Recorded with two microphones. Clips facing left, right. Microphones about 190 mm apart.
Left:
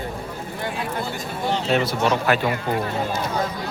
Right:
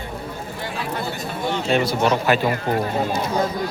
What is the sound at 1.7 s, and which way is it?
Speech, centre (ahead or behind).